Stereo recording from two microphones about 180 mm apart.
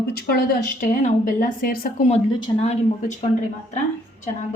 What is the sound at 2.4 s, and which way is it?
Speech, 35° left (ahead or behind).